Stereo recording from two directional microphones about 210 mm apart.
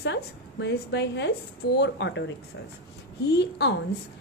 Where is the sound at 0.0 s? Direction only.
55° left (ahead or behind).